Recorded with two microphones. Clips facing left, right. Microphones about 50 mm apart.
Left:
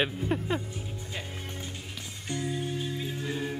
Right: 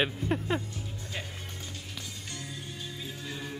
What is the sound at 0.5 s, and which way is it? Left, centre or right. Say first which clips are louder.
Speech: even; centre.